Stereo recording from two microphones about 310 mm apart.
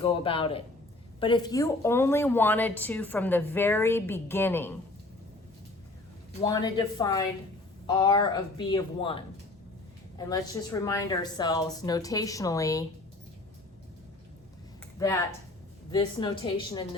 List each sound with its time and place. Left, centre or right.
0.0 s a woman's voice: centre
6.4 s a woman's voice: centre
14.9 s a woman's voice: centre